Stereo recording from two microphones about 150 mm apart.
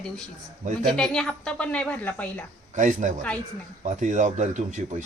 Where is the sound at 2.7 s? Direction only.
55° right (ahead or behind).